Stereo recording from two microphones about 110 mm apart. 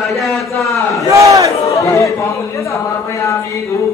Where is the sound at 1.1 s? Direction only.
30° right (ahead or behind).